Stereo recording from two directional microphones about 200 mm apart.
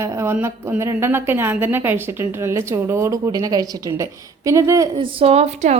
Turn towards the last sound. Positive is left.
turn(degrees=-35)  # may be behind; listen again after turning